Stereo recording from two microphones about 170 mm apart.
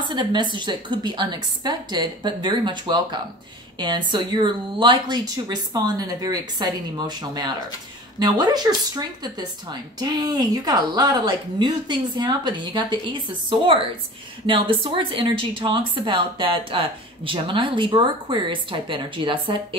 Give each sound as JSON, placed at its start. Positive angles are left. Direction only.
{"t": 0.1, "sound": "speech", "side_deg": -25}